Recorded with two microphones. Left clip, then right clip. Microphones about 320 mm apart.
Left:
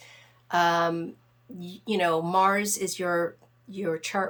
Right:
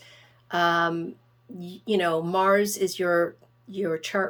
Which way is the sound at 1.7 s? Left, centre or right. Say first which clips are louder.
Right 1 dB; left.